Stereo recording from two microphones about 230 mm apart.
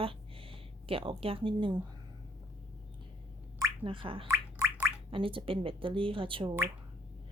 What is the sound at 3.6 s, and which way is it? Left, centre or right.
Speech, centre.